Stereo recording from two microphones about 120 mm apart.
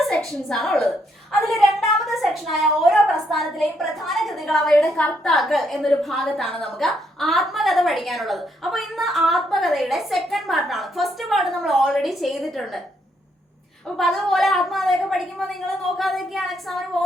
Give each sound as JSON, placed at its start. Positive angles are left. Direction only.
{"t": 0.4, "sound": "a woman's voice", "side_deg": 0}
{"t": 1.3, "sound": "a sound", "side_deg": 0}
{"t": 2.3, "sound": "a woman's voice", "side_deg": 0}
{"t": 13.8, "sound": "a woman's voice", "side_deg": 0}